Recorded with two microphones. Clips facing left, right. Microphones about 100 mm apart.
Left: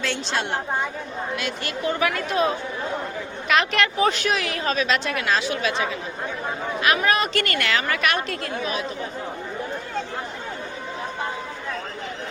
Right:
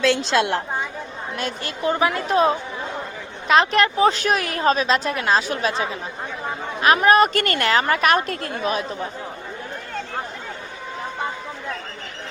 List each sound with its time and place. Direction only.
0.3 s a woman's voice: 90° right
1.4 s a woman's voice: 35° right (ahead or behind)
3.5 s a woman's voice: 35° right (ahead or behind)